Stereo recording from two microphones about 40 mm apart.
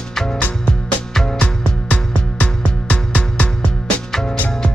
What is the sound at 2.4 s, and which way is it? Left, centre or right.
Music, left.